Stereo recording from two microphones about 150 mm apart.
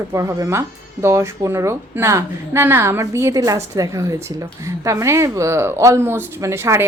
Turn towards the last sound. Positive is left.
turn(degrees=-15)  # may be behind; listen again after turning